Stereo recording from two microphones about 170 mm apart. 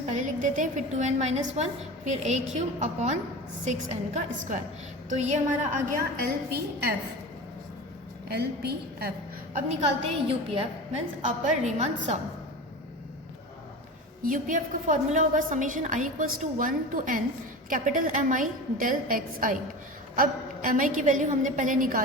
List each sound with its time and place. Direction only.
0.0 s a woman's voice: 45° right (ahead or behind)
6.2 s a woman's voice: 65° right (ahead or behind)
8.3 s a woman's voice: 70° right (ahead or behind)
10.2 s a woman's voice: 35° right (ahead or behind)
11.2 s a woman's voice: 45° right (ahead or behind)
14.3 s a woman's voice: 50° right (ahead or behind)